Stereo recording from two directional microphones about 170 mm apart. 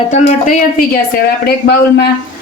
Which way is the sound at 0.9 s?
65° left (ahead or behind).